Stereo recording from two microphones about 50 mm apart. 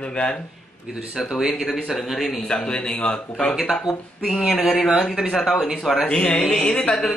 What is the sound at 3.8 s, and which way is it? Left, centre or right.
Speech, centre.